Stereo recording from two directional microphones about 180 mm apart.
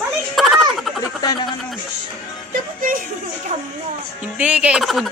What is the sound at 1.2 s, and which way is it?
Speech, 20° left (ahead or behind).